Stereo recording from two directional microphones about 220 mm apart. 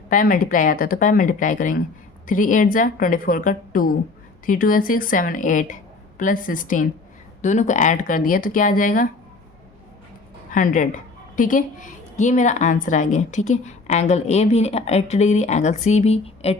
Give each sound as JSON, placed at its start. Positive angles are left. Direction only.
{"t": 0.1, "sound": "a woman's voice", "side_deg": 40}
{"t": 10.5, "sound": "a woman's voice", "side_deg": 35}